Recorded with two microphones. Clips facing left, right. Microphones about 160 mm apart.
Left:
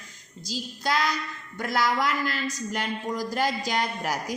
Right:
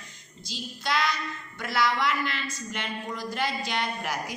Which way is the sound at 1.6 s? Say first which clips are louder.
Left 1 dB; 45° left (ahead or behind).